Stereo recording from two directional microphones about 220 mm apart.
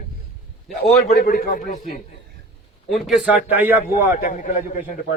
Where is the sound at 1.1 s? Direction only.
40° left (ahead or behind).